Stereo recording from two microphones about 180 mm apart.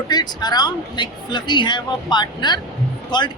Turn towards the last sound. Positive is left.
turn(degrees=25)  # may be behind; listen again after turning